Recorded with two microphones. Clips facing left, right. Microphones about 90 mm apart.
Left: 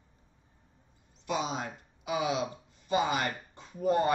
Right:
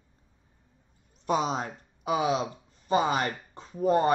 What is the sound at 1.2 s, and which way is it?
Speech, 45° right (ahead or behind).